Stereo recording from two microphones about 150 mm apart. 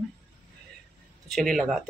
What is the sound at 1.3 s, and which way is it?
Speech, centre (ahead or behind).